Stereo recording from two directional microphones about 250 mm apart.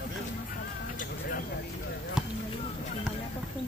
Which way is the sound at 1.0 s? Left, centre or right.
Left.